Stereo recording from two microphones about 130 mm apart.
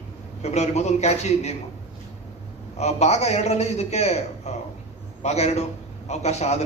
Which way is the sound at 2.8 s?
55° left (ahead or behind).